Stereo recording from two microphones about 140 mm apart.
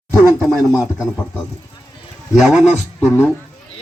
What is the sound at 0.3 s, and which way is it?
Speech, 5° left (ahead or behind).